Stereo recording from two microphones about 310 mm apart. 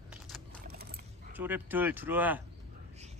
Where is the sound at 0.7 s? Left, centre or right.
Right.